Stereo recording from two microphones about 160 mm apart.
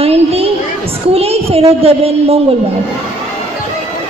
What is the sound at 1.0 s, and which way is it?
A woman's voice, 40° right (ahead or behind).